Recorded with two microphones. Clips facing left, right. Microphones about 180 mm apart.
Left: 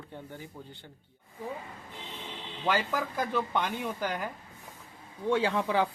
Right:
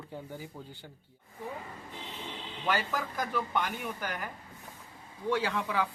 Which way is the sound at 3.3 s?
25° left (ahead or behind).